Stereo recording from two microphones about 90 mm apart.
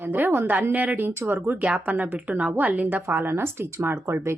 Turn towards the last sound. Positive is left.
turn(degrees=-30)  # may be behind; listen again after turning